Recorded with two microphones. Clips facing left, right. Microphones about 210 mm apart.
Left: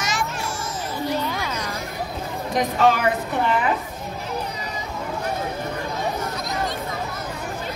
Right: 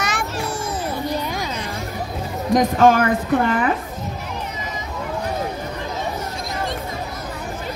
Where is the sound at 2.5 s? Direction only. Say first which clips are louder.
Right 5 dB; 45° right (ahead or behind).